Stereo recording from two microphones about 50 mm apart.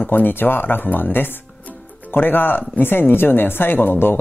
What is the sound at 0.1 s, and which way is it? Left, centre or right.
Speech, left.